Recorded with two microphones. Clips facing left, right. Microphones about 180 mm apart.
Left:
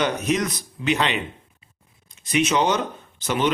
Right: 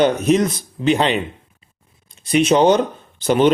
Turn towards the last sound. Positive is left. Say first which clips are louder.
# right 8 dB
turn(degrees=-30)  # may be behind; listen again after turning